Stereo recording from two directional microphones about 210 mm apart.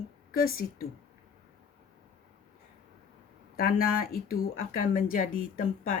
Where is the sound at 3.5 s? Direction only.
45° left (ahead or behind).